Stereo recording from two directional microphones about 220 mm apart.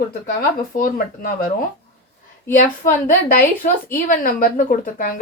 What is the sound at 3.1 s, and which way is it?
Speech, 40° left (ahead or behind).